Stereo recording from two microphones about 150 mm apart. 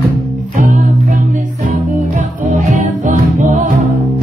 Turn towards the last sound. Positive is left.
turn(degrees=-55)  # may be behind; listen again after turning